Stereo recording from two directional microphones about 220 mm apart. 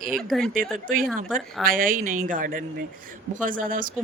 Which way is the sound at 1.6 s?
40° right (ahead or behind).